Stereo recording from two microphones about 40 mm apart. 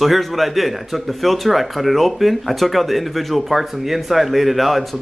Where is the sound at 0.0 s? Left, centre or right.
Centre.